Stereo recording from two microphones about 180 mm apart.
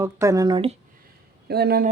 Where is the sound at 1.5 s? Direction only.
60° right (ahead or behind).